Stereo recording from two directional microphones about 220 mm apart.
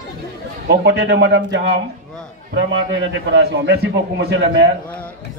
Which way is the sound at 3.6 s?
50° right (ahead or behind).